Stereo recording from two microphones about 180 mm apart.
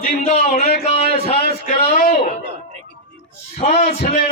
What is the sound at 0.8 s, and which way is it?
Speech, 35° left (ahead or behind).